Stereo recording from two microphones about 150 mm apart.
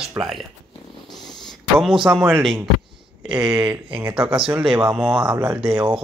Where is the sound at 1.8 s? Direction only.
Centre (ahead or behind).